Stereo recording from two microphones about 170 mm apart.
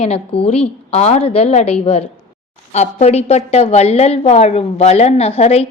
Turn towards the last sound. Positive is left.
turn(degrees=35)  # may be behind; listen again after turning